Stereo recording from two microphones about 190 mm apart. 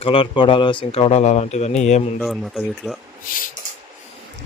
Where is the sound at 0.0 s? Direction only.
30° left (ahead or behind).